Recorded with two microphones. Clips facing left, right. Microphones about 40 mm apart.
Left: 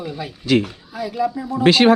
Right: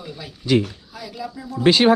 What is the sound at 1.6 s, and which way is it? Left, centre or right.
Speech, left.